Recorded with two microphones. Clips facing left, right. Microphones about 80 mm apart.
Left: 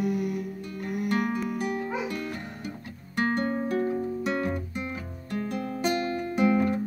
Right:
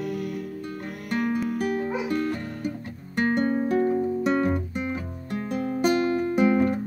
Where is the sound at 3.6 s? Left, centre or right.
Right.